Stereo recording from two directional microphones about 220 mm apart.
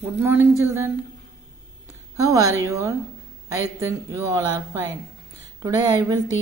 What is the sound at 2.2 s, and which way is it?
Speech, 15° right (ahead or behind).